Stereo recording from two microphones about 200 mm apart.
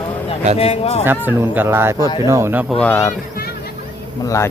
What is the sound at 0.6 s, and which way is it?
Speech, 30° left (ahead or behind).